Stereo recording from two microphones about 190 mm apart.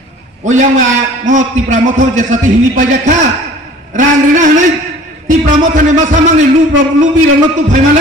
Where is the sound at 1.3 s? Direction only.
40° right (ahead or behind).